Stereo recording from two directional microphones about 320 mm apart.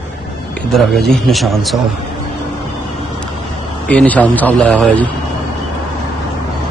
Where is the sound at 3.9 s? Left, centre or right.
Centre.